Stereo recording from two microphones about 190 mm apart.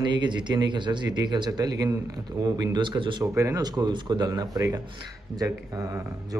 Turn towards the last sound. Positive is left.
turn(degrees=-15)  # may be behind; listen again after turning